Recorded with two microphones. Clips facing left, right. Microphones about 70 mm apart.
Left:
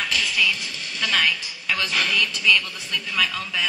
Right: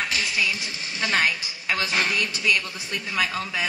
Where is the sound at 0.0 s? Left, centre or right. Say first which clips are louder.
Left 2 dB; right.